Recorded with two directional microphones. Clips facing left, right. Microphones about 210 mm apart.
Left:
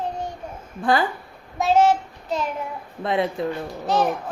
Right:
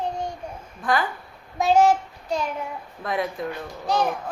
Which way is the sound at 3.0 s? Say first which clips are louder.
Left 4 dB; 25° left (ahead or behind).